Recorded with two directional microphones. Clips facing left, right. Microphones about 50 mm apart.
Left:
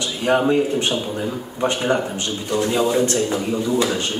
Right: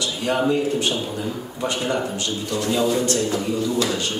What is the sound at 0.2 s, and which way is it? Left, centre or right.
A man's voice, left.